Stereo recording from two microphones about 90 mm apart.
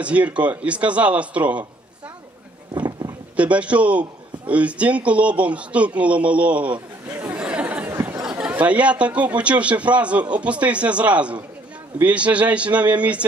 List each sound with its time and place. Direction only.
0.0 s a man's voice: 15° right (ahead or behind)
2.7 s a sound: 50° right (ahead or behind)
3.3 s a man's voice: 15° right (ahead or behind)